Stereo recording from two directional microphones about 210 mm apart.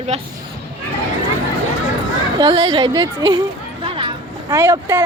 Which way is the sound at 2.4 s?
25° right (ahead or behind).